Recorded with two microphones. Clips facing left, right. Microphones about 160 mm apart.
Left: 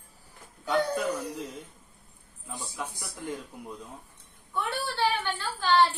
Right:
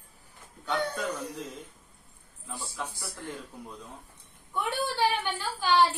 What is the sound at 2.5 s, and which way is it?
Speech, 15° left (ahead or behind).